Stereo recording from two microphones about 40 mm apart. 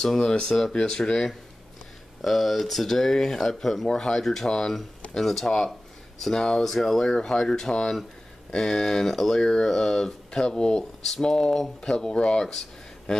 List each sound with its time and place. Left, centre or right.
0.2 s speech: left
2.2 s speech: centre
3.8 s speech: centre
9.4 s speech: centre